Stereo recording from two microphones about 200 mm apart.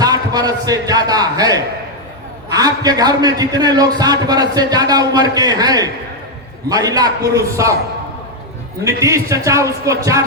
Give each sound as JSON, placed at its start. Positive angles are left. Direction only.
{"t": 0.0, "sound": "a man's voice", "side_deg": -20}
{"t": 8.8, "sound": "a man's voice", "side_deg": -15}